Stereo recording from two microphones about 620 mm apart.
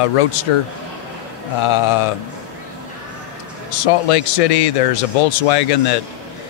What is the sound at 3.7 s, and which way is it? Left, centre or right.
Speech, left.